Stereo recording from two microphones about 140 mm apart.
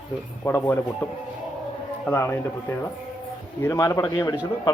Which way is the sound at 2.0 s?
20° left (ahead or behind).